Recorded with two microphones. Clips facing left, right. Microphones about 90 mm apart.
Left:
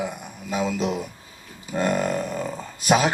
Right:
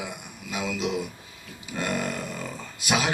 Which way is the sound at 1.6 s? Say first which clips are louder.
Left 6 dB; 40° left (ahead or behind).